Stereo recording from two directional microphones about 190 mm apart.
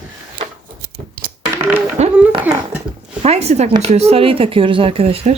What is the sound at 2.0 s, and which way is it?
Speech, 35° right (ahead or behind).